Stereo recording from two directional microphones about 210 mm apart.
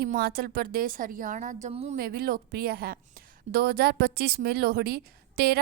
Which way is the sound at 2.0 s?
45° right (ahead or behind).